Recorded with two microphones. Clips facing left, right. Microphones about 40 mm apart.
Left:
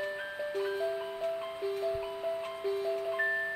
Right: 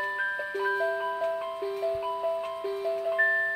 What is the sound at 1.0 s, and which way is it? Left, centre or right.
Glockenspiel, right.